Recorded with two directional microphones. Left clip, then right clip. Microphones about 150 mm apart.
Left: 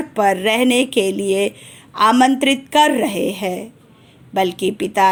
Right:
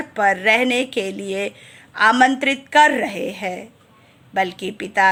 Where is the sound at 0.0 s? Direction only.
25° left (ahead or behind).